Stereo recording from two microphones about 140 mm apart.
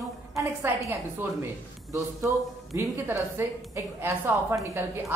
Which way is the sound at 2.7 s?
20° right (ahead or behind).